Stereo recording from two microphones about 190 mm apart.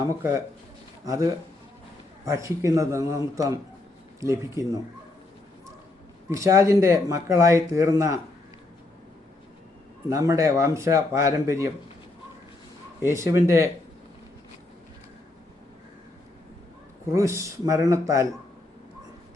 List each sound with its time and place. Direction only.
1.0 s speech: 15° right (ahead or behind)
6.3 s speech: 15° right (ahead or behind)
10.1 s speech: 15° right (ahead or behind)
13.0 s speech: 15° right (ahead or behind)
17.2 s speech: 15° right (ahead or behind)